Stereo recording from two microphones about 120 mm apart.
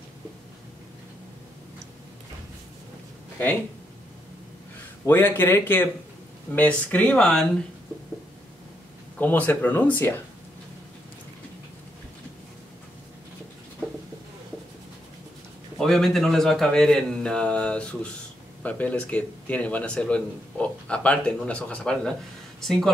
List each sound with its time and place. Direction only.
5.0 s speech: 20° left (ahead or behind)
9.2 s speech: 15° left (ahead or behind)
15.8 s a man's voice: 5° left (ahead or behind)